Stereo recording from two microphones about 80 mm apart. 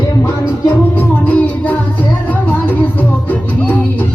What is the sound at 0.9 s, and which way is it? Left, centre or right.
Music, left.